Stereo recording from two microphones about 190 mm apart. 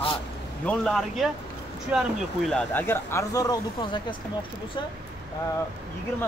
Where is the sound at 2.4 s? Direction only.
10° left (ahead or behind).